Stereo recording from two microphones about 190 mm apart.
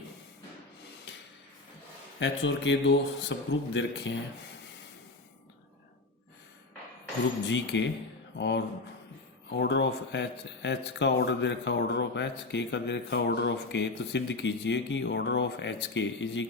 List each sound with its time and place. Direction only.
2.1 s speech: 70° left (ahead or behind)
7.4 s speech: 70° left (ahead or behind)